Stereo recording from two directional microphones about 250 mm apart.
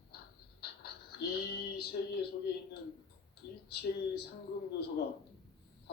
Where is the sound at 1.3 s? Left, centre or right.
Left.